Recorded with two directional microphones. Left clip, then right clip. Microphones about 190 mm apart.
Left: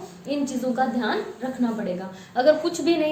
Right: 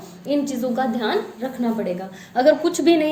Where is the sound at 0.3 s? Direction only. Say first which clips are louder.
Right 4 dB; 45° right (ahead or behind).